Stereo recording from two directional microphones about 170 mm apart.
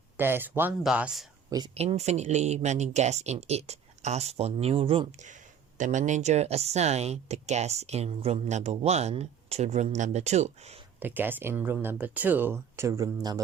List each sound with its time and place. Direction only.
0.2 s speech: 10° right (ahead or behind)
1.5 s speech: 25° right (ahead or behind)
1.7 s speech: 35° right (ahead or behind)
5.3 s speech: 45° right (ahead or behind)
11.0 s speech: 10° right (ahead or behind)